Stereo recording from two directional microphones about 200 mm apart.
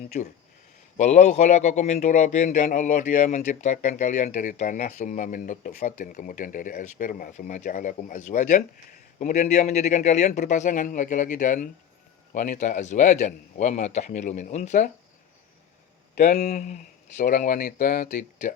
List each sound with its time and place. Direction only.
0.1 s speech: 35° left (ahead or behind)
16.1 s speech: 35° left (ahead or behind)